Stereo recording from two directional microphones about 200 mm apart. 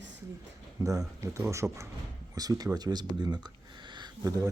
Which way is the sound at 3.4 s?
20° right (ahead or behind).